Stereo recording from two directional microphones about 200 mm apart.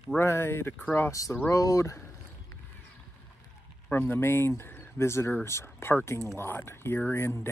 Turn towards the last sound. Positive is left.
turn(degrees=10)  # may be behind; listen again after turning